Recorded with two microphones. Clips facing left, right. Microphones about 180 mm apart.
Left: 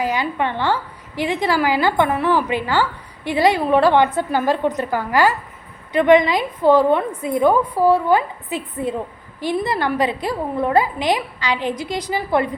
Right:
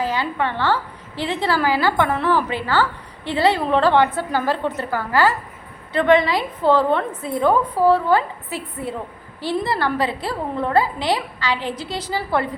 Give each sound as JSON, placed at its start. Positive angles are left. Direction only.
{"t": 0.0, "sound": "a woman's voice", "side_deg": 15}